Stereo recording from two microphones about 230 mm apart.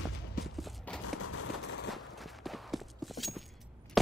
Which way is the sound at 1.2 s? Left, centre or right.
Left.